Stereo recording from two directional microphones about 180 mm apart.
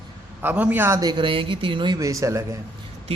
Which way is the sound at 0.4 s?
10° right (ahead or behind).